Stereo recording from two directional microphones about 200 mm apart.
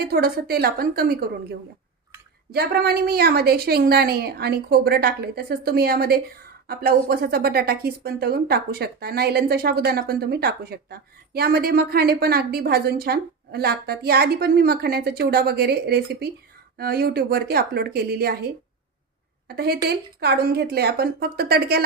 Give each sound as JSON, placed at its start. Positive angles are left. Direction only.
{"t": 0.0, "sound": "a woman's voice", "side_deg": -50}
{"t": 2.5, "sound": "a woman's voice", "side_deg": -50}